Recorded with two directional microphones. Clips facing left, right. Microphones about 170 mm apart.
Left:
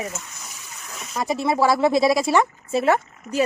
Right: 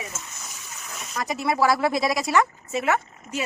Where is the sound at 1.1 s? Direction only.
25° left (ahead or behind).